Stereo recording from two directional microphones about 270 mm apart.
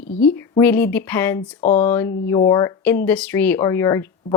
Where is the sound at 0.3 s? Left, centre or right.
Centre.